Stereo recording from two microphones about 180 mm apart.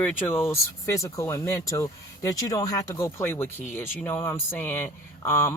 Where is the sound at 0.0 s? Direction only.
10° left (ahead or behind).